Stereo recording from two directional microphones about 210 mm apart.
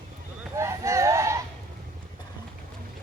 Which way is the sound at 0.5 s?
15° right (ahead or behind).